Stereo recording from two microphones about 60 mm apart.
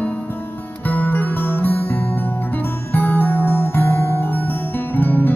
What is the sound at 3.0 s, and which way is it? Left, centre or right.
Music, left.